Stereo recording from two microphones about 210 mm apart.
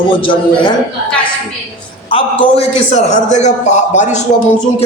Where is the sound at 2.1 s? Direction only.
25° left (ahead or behind).